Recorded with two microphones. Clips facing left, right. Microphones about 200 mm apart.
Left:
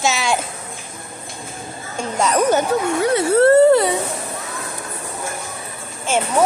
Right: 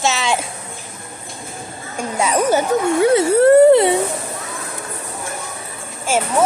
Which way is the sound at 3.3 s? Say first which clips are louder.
Right 1 dB; 15° right (ahead or behind).